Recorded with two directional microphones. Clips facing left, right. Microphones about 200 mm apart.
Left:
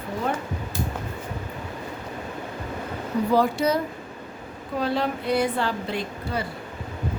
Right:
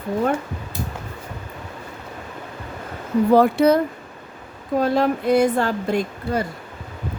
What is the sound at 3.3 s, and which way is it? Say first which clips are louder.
Speech: right 7 dB; 55° right (ahead or behind).